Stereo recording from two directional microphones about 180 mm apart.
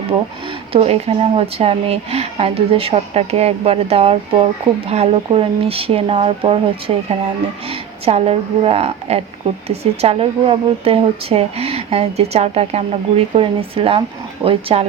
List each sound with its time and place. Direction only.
0.7 s speech: 35° right (ahead or behind)